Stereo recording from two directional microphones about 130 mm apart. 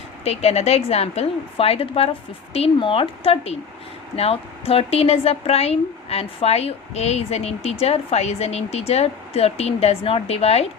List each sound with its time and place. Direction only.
0.3 s a woman's voice: 55° left (ahead or behind)